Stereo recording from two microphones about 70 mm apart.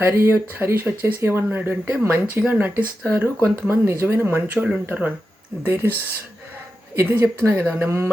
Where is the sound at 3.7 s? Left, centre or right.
Right.